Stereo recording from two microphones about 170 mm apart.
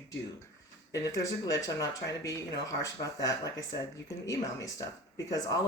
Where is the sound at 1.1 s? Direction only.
20° left (ahead or behind).